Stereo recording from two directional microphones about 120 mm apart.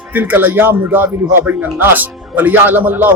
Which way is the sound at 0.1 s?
15° right (ahead or behind).